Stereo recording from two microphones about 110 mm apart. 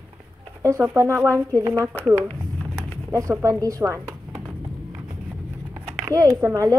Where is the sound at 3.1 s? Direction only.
30° right (ahead or behind).